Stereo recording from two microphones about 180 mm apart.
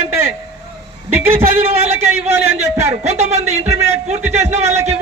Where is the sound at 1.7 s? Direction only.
35° right (ahead or behind).